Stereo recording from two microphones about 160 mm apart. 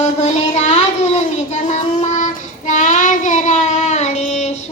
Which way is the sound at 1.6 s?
50° left (ahead or behind).